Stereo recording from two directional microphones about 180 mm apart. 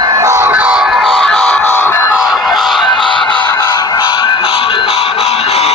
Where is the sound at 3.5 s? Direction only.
15° left (ahead or behind).